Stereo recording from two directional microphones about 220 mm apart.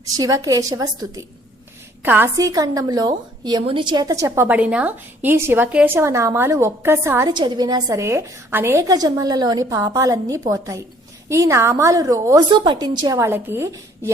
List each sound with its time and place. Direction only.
0.0 s a woman's voice: 15° right (ahead or behind)